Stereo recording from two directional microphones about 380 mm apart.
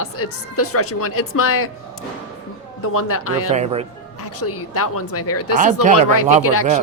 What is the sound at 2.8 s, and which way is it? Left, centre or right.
Speech, left.